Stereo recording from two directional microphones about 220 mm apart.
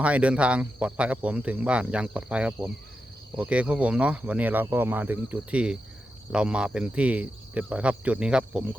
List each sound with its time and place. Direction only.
0.0 s speech: 5° right (ahead or behind)